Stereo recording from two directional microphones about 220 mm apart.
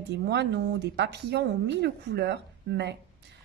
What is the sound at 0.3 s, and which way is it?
Speech, 50° right (ahead or behind).